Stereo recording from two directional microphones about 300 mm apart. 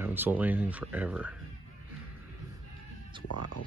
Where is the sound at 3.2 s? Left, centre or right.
Left.